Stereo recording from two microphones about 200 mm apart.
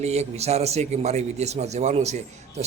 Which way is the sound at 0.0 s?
35° right (ahead or behind).